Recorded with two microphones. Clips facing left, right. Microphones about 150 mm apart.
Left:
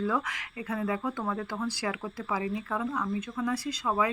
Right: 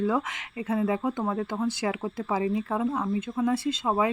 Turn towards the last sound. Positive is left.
turn(degrees=-25)  # may be behind; listen again after turning